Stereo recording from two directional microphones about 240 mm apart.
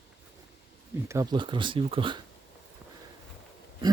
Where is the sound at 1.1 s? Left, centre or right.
Centre.